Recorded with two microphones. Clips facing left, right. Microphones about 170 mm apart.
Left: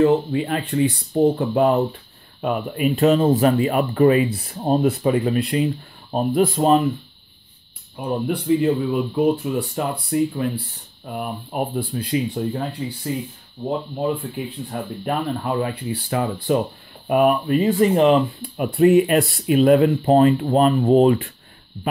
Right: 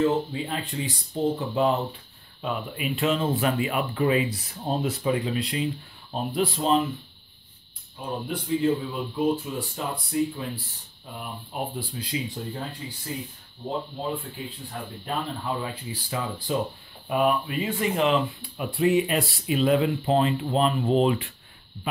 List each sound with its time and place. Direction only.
0.0 s speech: 65° left (ahead or behind)
8.3 s speech: 65° left (ahead or behind)
14.7 s speech: 60° left (ahead or behind)
17.1 s speech: 50° left (ahead or behind)
18.1 s speech: 55° left (ahead or behind)